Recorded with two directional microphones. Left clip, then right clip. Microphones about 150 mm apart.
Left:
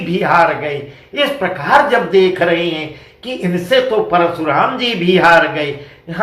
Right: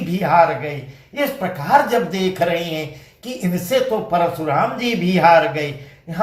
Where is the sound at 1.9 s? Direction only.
40° right (ahead or behind).